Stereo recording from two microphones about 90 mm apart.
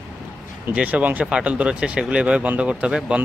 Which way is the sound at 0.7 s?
15° right (ahead or behind).